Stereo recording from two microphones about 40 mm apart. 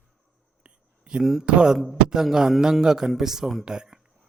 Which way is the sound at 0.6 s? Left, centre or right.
Right.